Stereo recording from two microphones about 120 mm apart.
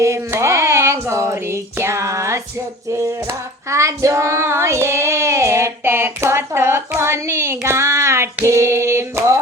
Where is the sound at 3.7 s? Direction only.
25° right (ahead or behind).